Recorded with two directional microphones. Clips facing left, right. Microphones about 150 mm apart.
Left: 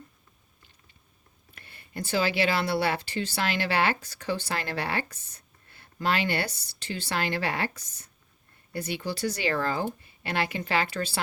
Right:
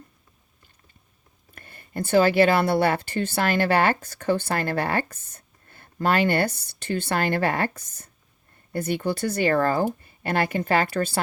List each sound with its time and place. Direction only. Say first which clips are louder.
1.5 s speech: right 6 dB; 45° right (ahead or behind)